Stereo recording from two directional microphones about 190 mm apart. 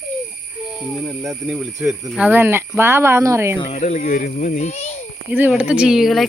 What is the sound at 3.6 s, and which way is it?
A child's voice, 35° left (ahead or behind).